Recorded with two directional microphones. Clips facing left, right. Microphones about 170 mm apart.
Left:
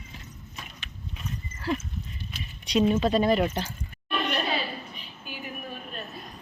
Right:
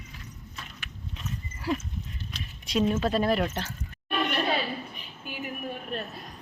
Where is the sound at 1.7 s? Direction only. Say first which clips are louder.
Even; 10° right (ahead or behind).